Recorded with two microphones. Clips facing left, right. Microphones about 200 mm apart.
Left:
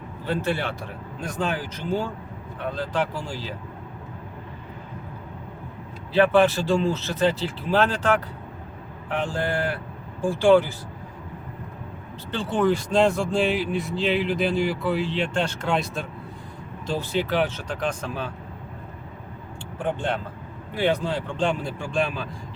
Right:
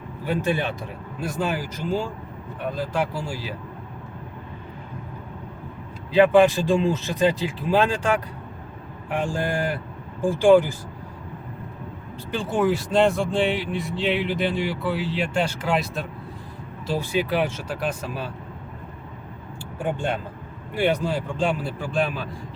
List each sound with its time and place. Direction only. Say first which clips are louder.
0.3 s speech: right 2 dB; 15° right (ahead or behind)
6.1 s speech: right 3 dB; 15° right (ahead or behind)
12.3 s speech: even; 10° right (ahead or behind)
19.8 s speech: even; 10° right (ahead or behind)